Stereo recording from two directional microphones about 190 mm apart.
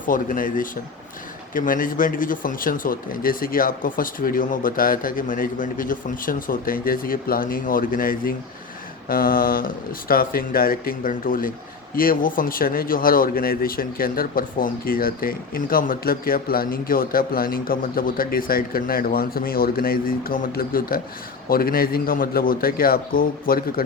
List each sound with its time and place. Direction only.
0.0 s speech: 45° left (ahead or behind)